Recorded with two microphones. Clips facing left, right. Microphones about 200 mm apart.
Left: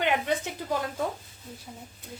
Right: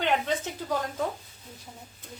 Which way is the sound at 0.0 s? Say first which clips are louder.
Even; 10° left (ahead or behind).